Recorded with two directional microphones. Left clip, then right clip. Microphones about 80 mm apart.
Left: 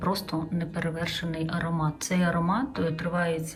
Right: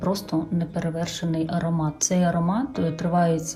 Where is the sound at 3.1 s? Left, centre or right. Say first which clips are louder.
Right 8 dB; right.